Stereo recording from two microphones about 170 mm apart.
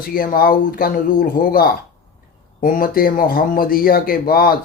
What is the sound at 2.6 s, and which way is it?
A man's voice, 55° left (ahead or behind).